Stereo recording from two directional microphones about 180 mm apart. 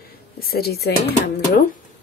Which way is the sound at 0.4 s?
60° left (ahead or behind).